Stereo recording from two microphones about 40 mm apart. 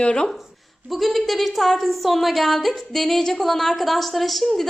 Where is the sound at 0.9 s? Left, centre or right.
Centre.